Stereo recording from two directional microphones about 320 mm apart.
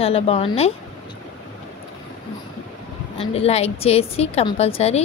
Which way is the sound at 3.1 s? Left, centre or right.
Centre.